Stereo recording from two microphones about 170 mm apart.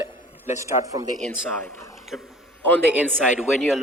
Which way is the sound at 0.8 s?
20° right (ahead or behind).